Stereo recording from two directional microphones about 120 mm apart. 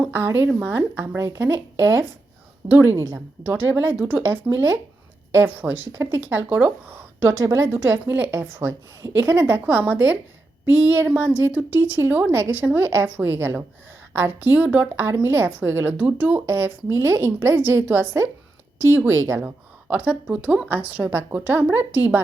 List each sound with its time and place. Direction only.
0.1 s a woman's voice: 20° right (ahead or behind)